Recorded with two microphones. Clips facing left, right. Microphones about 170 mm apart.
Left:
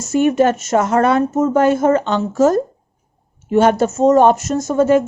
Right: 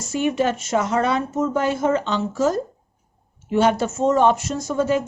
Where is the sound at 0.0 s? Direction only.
50° left (ahead or behind).